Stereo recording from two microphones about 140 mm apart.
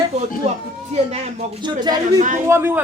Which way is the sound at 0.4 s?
50° right (ahead or behind).